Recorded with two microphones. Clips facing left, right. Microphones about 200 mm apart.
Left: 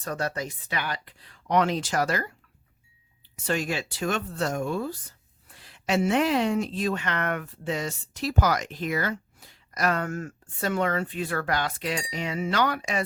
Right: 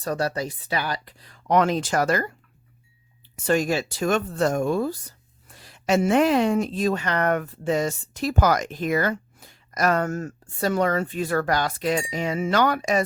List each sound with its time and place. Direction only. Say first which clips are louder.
0.0 s speech: right 5 dB; 35° right (ahead or behind)
3.4 s a woman's voice: right 6 dB; 45° right (ahead or behind)